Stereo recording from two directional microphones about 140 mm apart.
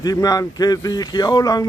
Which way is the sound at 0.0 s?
25° left (ahead or behind).